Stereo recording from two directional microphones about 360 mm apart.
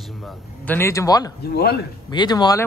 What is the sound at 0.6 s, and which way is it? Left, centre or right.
Speech, centre.